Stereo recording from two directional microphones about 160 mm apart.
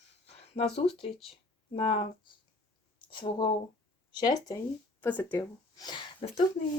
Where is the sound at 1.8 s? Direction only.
35° left (ahead or behind).